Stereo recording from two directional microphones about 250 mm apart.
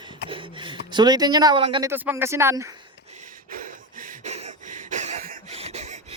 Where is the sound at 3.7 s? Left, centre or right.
Right.